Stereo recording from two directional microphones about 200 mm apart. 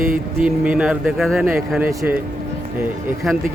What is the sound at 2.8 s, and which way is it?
Speech, centre (ahead or behind).